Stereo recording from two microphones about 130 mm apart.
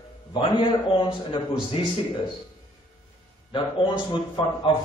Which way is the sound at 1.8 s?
45° left (ahead or behind).